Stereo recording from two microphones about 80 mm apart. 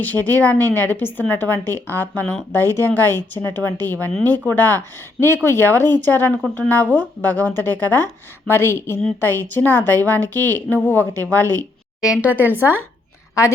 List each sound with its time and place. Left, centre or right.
0.0 s a woman's voice: left
11.9 s a woman's voice: centre
12.3 s speech: right